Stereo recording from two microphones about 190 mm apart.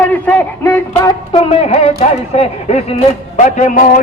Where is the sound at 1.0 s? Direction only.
20° left (ahead or behind).